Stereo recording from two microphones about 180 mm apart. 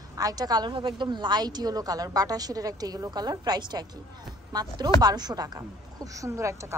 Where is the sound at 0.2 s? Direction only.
20° right (ahead or behind).